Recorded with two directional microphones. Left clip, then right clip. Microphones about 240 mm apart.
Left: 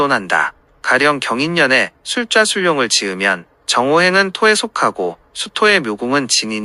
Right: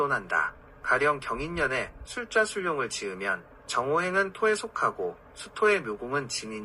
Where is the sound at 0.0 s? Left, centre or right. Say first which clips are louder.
Left 12 dB; left.